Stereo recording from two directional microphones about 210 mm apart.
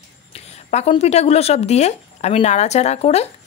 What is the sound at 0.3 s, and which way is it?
A woman's voice, 30° left (ahead or behind).